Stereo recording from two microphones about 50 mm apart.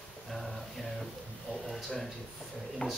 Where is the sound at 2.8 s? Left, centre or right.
Left.